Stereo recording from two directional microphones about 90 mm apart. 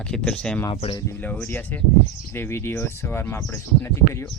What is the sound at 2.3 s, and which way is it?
Speech, 30° left (ahead or behind).